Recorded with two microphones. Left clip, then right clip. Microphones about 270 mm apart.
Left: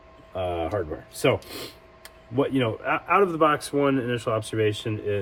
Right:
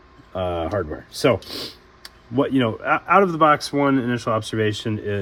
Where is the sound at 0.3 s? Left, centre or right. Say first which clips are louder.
Right 3 dB; right.